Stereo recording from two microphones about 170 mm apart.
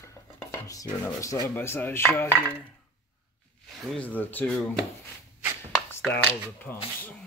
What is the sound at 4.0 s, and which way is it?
Chopping, 10° left (ahead or behind).